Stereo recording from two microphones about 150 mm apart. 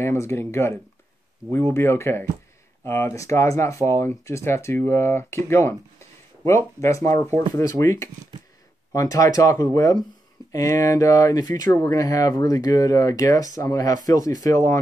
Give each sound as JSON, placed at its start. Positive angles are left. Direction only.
{"t": 0.0, "sound": "speech", "side_deg": 15}